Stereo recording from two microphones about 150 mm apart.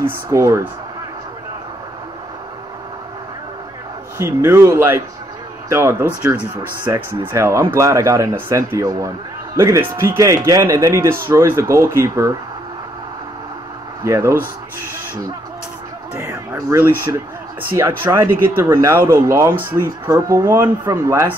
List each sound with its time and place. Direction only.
0.0 s speech: 15° right (ahead or behind)
4.2 s speech: 15° right (ahead or behind)
14.0 s speech: 15° right (ahead or behind)
16.2 s speech: 15° right (ahead or behind)